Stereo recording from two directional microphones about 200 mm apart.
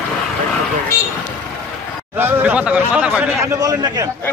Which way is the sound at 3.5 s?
20° right (ahead or behind).